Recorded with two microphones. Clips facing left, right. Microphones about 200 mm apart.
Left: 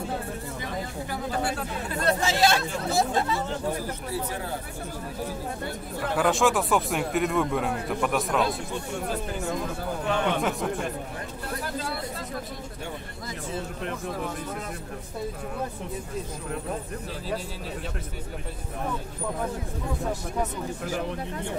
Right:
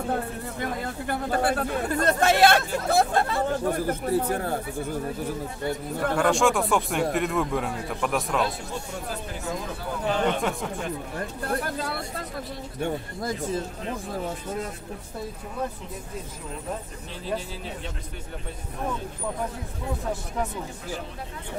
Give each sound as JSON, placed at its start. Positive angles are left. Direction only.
{"t": 0.1, "sound": "speech", "side_deg": -60}
{"t": 6.1, "sound": "speech", "side_deg": 0}
{"t": 10.0, "sound": "speech", "side_deg": 60}
{"t": 11.4, "sound": "speech", "side_deg": -55}